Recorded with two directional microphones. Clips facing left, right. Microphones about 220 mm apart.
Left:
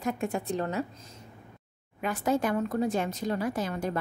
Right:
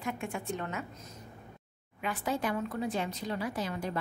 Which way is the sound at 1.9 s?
45° left (ahead or behind).